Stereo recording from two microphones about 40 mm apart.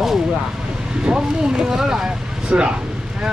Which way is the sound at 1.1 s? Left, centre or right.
Centre.